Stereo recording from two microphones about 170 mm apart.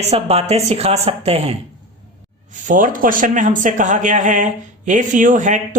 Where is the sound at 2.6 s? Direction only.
50° right (ahead or behind).